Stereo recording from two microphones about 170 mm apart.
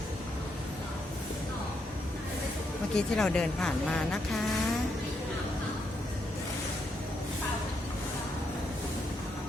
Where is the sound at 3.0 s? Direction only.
5° left (ahead or behind).